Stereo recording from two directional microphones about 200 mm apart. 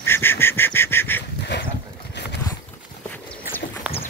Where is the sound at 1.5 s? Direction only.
60° left (ahead or behind).